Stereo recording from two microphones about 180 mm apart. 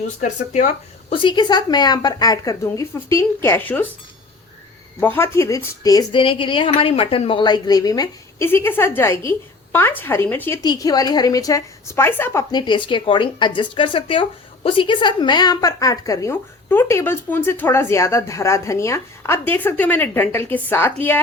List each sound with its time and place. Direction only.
0.2 s speech: 45° left (ahead or behind)
1.1 s a woman's voice: 25° left (ahead or behind); by 3.8 s 10° left (ahead or behind)
4.9 s a woman's voice: 10° left (ahead or behind)
10.6 s a woman's voice: 20° left (ahead or behind)